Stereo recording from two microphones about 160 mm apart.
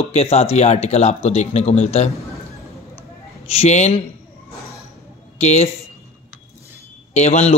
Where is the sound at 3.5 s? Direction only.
45° left (ahead or behind).